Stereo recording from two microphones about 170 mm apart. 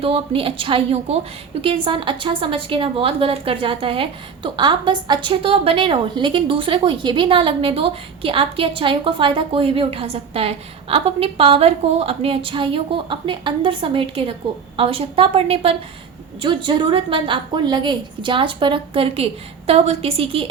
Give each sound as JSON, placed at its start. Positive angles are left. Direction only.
{"t": 0.0, "sound": "a woman's voice", "side_deg": -35}